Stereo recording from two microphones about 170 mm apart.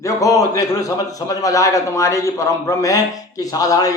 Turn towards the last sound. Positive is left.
turn(degrees=20)  # may be behind; listen again after turning